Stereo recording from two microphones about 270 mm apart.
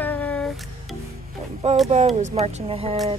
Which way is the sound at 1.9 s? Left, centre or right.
Right.